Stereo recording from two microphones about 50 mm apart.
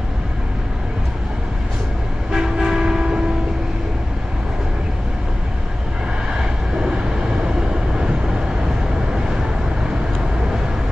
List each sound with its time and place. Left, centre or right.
2.3 s train: centre
6.3 s vehicle: centre
8.0 s vehicle: centre